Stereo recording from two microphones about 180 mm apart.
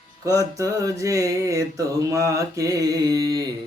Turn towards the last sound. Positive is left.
turn(degrees=-20)  # may be behind; listen again after turning